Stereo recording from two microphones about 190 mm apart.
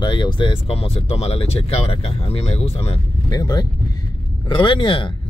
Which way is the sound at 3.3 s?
20° left (ahead or behind).